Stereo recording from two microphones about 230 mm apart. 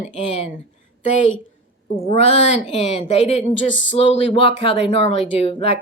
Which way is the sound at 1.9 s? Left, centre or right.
Left.